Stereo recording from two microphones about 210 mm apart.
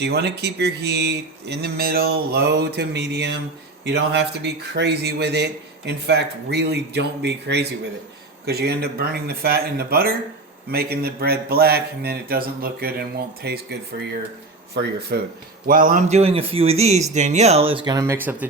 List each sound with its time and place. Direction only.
0.0 s a man's voice: 50° right (ahead or behind)
14.8 s a man's voice: 50° right (ahead or behind); by 18.4 s 10° right (ahead or behind)